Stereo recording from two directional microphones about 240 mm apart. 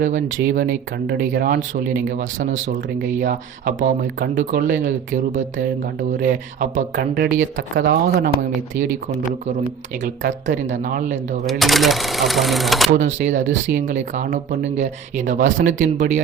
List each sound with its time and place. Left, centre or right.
0.0 s speech: right
10.0 s speech: right
11.4 s speech: centre
13.0 s speech: right